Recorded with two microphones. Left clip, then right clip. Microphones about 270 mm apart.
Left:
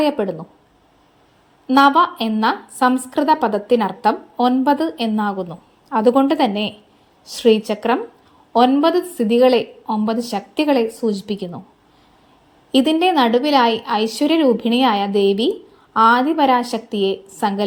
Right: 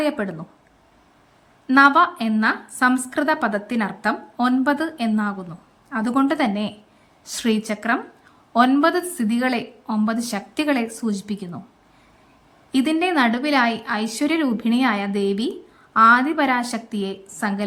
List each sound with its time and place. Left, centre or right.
1.6 s a woman's voice: centre
12.7 s a woman's voice: centre